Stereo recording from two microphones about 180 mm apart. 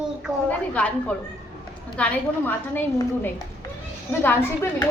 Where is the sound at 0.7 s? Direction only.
5° left (ahead or behind).